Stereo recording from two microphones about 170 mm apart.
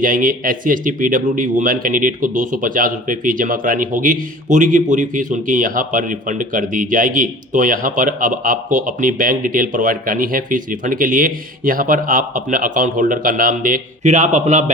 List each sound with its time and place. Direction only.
0.0 s speech: 55° right (ahead or behind)